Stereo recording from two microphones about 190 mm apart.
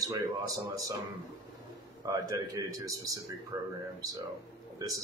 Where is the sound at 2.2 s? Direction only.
15° right (ahead or behind).